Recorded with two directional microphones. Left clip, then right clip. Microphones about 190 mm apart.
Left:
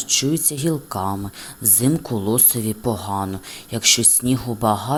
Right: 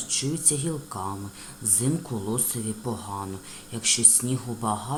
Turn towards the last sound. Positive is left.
turn(degrees=40)  # may be behind; listen again after turning